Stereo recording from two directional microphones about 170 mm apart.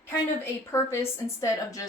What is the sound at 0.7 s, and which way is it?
Speech, 15° left (ahead or behind).